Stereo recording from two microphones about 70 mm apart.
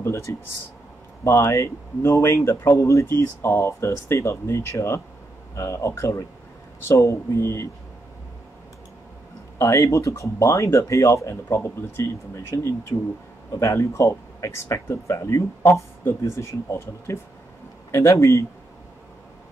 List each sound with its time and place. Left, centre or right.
0.0 s a sound: left
1.2 s speech: left
9.6 s speech: left